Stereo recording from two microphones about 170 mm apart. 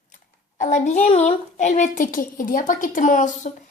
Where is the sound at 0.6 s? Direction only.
45° left (ahead or behind).